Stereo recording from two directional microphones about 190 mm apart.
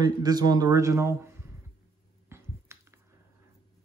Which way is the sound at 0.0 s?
20° right (ahead or behind).